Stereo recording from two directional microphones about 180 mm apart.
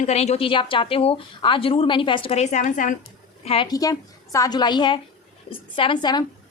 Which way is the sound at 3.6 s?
20° left (ahead or behind).